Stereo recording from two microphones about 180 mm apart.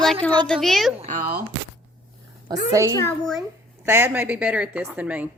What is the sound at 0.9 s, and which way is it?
Speech, 40° right (ahead or behind).